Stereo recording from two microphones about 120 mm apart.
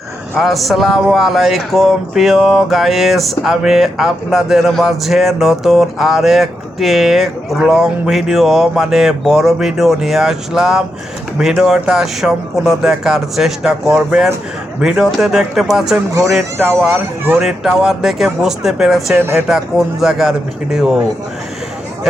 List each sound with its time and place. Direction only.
0.3 s speech: centre (ahead or behind)
19.1 s speech: 15° right (ahead or behind)
19.5 s speech: 5° right (ahead or behind)